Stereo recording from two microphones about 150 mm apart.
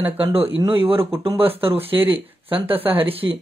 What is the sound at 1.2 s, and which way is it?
Speech, 40° right (ahead or behind).